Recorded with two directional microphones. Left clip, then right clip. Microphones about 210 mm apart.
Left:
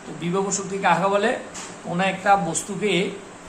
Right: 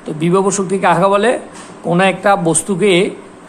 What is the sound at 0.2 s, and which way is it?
A man's voice, 50° right (ahead or behind).